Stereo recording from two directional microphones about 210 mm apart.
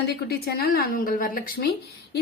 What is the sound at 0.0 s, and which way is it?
A woman's voice, 50° left (ahead or behind).